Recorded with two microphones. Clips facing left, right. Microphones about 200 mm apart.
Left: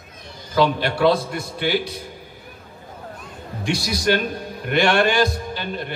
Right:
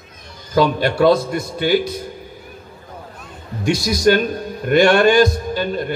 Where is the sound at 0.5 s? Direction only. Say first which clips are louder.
Right 3 dB; 45° right (ahead or behind).